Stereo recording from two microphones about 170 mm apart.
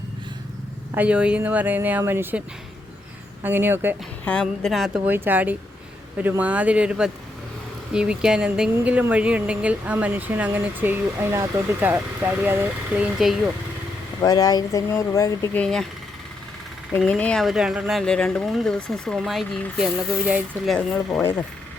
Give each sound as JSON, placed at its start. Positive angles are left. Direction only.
{"t": 0.9, "sound": "speech", "side_deg": -5}
{"t": 3.4, "sound": "speech", "side_deg": -10}
{"t": 4.3, "sound": "speech", "side_deg": 5}
{"t": 5.1, "sound": "speech", "side_deg": -10}
{"t": 14.2, "sound": "speech", "side_deg": 20}
{"t": 15.6, "sound": "speech", "side_deg": 5}
{"t": 17.0, "sound": "speech", "side_deg": 5}